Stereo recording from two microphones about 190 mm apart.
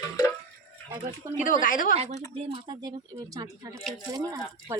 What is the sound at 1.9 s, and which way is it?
Speech, 35° right (ahead or behind).